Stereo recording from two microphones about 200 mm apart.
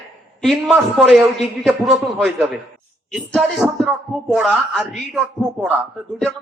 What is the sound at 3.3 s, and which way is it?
A man's voice, centre (ahead or behind).